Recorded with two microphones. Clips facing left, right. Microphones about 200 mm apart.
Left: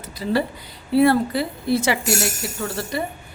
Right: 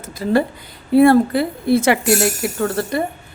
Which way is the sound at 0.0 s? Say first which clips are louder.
Right 5 dB; 50° right (ahead or behind).